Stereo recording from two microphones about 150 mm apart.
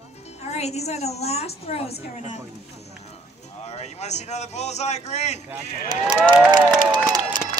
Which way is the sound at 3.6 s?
45° left (ahead or behind).